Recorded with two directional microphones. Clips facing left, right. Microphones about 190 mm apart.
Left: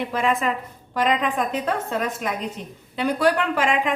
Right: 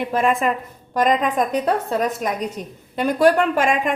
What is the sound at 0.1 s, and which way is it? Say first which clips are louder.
A woman's voice: right 5 dB; 50° right (ahead or behind).